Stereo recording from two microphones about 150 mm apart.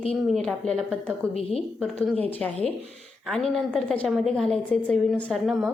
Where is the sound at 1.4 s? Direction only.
40° left (ahead or behind).